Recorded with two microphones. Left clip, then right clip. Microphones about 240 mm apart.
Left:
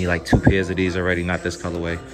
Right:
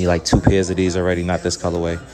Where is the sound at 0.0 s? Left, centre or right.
Centre.